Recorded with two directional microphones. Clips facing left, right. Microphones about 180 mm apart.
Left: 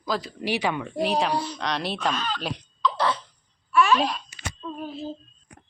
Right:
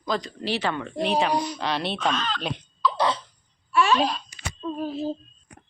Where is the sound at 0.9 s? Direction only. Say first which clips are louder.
Right 2 dB; centre (ahead or behind).